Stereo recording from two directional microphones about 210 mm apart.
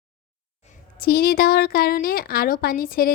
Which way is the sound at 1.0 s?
45° left (ahead or behind).